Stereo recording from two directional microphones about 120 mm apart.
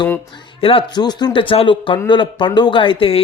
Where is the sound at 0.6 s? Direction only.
50° left (ahead or behind).